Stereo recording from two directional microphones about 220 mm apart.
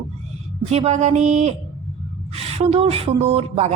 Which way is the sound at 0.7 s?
30° right (ahead or behind).